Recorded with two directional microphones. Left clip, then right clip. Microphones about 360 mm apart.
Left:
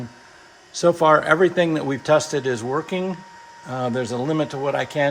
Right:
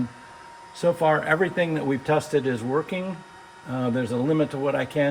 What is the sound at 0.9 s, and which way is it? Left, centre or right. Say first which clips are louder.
Speech: left 6 dB; centre.